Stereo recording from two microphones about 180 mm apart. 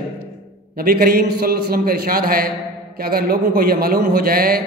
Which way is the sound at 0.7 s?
55° right (ahead or behind).